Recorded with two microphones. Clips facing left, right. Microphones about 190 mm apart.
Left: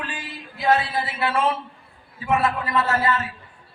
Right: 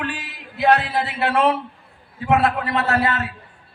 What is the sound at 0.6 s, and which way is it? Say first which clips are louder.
A man's voice: right 3 dB; 65° right (ahead or behind).